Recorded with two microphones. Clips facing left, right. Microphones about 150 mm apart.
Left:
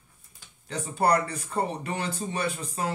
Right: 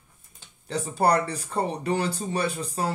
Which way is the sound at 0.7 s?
35° right (ahead or behind).